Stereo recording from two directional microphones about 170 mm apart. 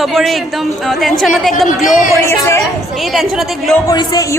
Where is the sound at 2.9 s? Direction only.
Centre (ahead or behind).